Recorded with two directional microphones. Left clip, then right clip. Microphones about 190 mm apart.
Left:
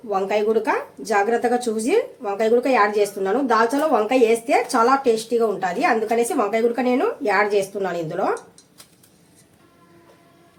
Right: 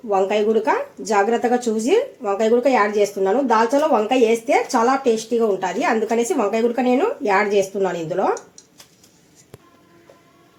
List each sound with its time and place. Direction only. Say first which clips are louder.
0.1 s a woman's voice: right 2 dB; 20° right (ahead or behind)